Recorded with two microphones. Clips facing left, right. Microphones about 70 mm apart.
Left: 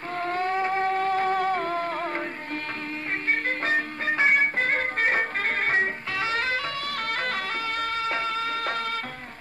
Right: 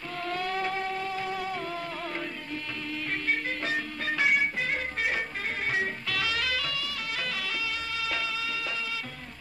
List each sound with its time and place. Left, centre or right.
0.2 s music: left
3.3 s music: left
6.9 s music: left